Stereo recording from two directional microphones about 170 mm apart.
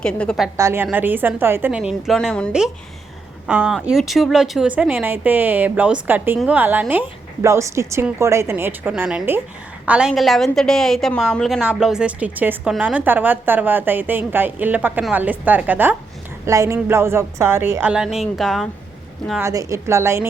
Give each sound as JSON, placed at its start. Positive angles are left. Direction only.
{"t": 0.0, "sound": "a woman's voice", "side_deg": 5}
{"t": 0.5, "sound": "a woman's voice", "side_deg": -15}
{"t": 19.4, "sound": "a woman's voice", "side_deg": -20}